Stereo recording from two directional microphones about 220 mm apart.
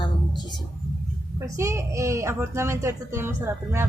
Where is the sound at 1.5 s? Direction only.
15° right (ahead or behind).